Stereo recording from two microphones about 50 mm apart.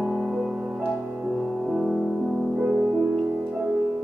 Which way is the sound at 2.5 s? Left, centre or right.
Right.